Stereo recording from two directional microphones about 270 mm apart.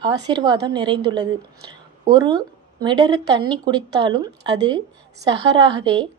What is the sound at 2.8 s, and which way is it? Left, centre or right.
Speech, centre.